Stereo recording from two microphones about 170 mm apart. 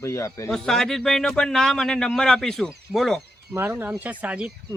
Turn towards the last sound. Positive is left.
turn(degrees=-5)  # may be behind; listen again after turning